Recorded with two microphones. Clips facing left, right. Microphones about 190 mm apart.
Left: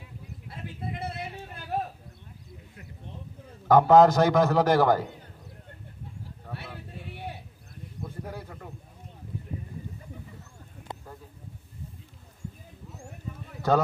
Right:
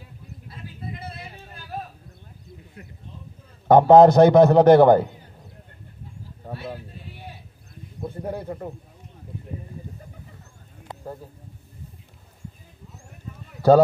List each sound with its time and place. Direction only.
0.9 s a sound: 70° left (ahead or behind)
3.6 s a man's voice: 30° right (ahead or behind)
8.0 s speech: 30° right (ahead or behind)
13.6 s clip-clop: 35° right (ahead or behind)